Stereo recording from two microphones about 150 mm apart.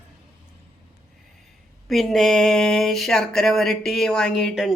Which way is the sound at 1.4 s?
Centre (ahead or behind).